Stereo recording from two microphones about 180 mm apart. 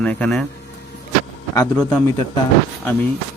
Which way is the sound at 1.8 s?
5° left (ahead or behind).